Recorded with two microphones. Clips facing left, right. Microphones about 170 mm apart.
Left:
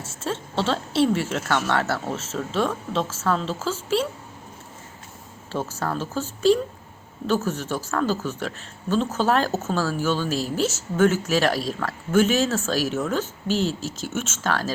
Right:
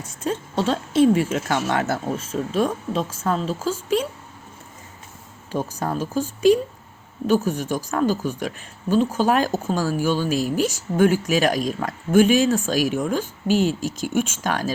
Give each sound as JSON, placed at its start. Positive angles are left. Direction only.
{"t": 0.0, "sound": "speech", "side_deg": -15}
{"t": 5.5, "sound": "speech", "side_deg": -15}